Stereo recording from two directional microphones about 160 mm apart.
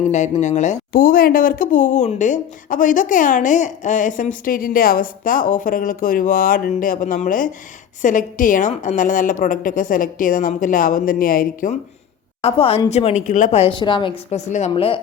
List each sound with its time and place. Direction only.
0.1 s speech: 45° left (ahead or behind); by 11.7 s 65° left (ahead or behind)
12.4 s a woman's voice: 40° left (ahead or behind)
14.3 s a woman's voice: 45° left (ahead or behind)
14.7 s speech: 35° left (ahead or behind)